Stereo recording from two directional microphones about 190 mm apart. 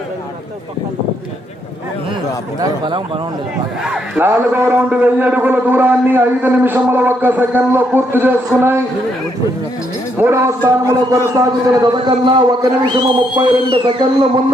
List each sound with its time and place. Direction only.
2.6 s a man's voice: 25° right (ahead or behind)
3.8 s a man's voice: 5° right (ahead or behind)
10.2 s a man's voice: 15° right (ahead or behind)